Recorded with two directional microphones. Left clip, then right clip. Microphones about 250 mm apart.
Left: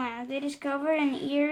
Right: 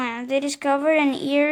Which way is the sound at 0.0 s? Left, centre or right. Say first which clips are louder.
Right 9 dB; right.